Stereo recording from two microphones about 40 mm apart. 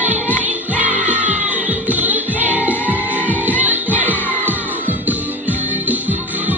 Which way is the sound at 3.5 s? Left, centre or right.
Right.